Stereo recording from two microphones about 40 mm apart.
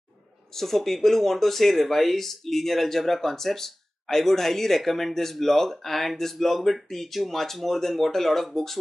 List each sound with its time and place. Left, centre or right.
0.6 s speech: centre